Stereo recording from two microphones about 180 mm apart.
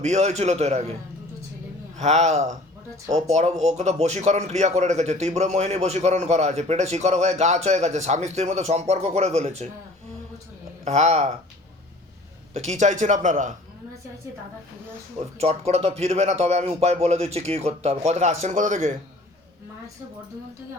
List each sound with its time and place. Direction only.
0.0 s speech: 40° right (ahead or behind)
2.0 s speech: 40° right (ahead or behind)
10.8 s speech: 40° right (ahead or behind)
12.5 s a man's voice: 40° right (ahead or behind)
15.4 s speech: 35° right (ahead or behind)